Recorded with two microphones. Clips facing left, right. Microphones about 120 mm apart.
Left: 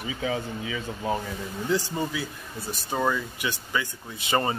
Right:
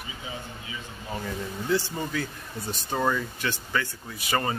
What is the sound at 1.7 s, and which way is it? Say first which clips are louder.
Speech: even; 15° left (ahead or behind).